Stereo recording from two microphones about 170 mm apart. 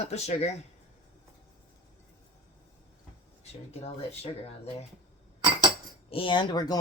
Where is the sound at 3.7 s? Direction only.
40° left (ahead or behind).